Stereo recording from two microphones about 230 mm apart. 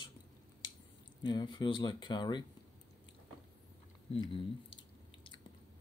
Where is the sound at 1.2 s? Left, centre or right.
Centre.